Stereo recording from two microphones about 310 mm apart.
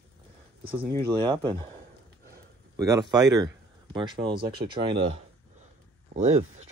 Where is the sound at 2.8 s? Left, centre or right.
Centre.